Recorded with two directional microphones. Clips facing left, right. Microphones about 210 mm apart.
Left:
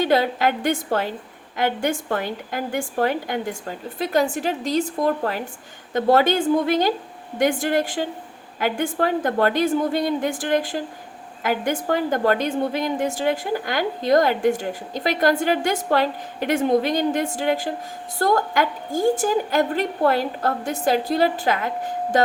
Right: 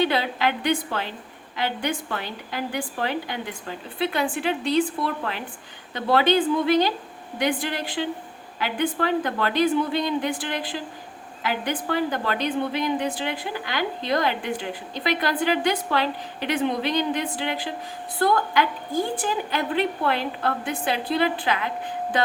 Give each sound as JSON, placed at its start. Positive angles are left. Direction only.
{"t": 0.0, "sound": "a woman's voice", "side_deg": 45}